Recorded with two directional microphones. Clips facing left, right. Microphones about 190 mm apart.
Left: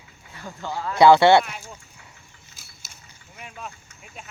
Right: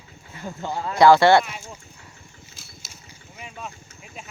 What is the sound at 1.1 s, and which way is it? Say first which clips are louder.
Speech: even; 20° left (ahead or behind).